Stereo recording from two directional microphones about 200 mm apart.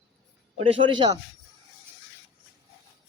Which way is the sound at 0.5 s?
25° right (ahead or behind).